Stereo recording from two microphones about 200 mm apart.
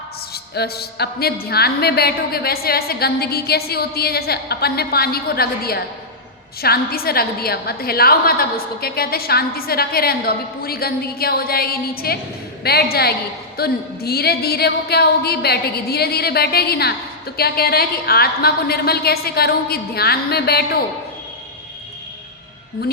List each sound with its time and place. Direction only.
0.5 s a woman's voice: 55° left (ahead or behind)